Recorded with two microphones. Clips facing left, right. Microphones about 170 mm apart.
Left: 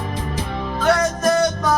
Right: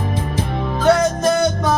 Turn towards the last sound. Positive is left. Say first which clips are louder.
# right 3 dB
turn(degrees=-20)  # may be behind; listen again after turning